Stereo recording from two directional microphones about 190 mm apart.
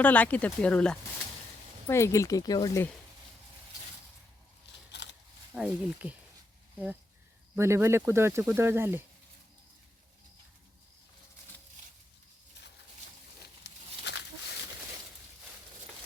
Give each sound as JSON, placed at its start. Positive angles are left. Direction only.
{"t": 0.0, "sound": "speech", "side_deg": 10}
{"t": 5.5, "sound": "speech", "side_deg": -5}
{"t": 7.5, "sound": "speech", "side_deg": -15}
{"t": 13.4, "sound": "a sound", "side_deg": 60}